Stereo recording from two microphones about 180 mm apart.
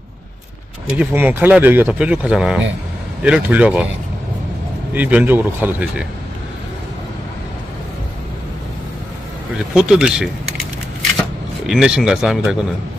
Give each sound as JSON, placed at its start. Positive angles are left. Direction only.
{"t": 0.9, "sound": "speech", "side_deg": -10}
{"t": 4.9, "sound": "speech", "side_deg": -10}
{"t": 9.8, "sound": "speech", "side_deg": -5}